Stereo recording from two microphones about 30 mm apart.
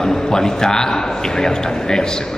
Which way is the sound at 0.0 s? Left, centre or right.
Left.